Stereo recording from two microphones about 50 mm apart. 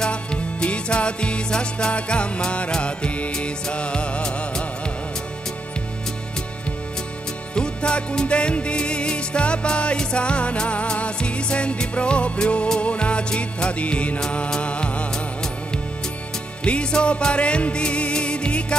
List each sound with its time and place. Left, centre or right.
0.0 s music: centre
7.5 s music: centre
16.6 s music: left